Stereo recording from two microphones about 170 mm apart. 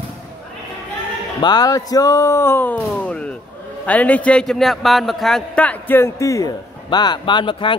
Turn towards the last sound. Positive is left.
turn(degrees=30)  # may be behind; listen again after turning